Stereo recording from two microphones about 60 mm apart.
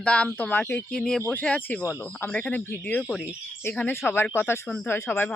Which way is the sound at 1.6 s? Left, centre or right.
Left.